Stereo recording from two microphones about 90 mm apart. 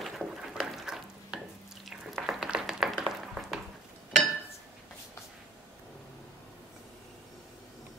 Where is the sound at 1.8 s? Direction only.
5° right (ahead or behind).